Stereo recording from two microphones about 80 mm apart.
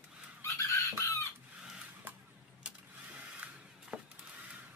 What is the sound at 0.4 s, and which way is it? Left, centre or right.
Chicken, left.